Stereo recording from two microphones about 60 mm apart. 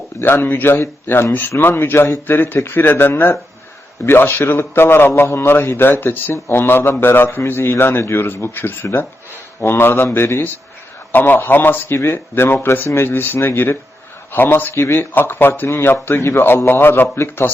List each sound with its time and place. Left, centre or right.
0.2 s a man's voice: left
11.9 s a man's voice: left
15.6 s a man's voice: left